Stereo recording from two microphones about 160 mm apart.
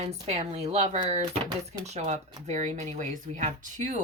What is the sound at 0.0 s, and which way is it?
Speech, 40° right (ahead or behind).